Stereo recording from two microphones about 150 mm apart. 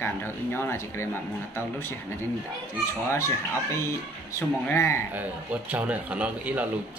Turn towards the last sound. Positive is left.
turn(degrees=-10)  # may be behind; listen again after turning